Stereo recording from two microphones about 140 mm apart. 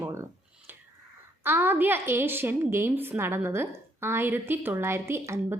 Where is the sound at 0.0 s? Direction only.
20° right (ahead or behind).